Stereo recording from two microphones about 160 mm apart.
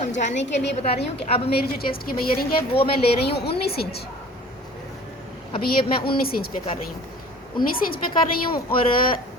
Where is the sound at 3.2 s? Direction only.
90° left.